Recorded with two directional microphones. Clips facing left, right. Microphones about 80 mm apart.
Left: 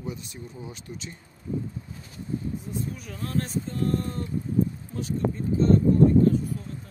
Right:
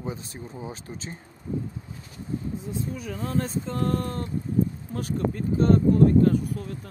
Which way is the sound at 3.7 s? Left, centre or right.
Right.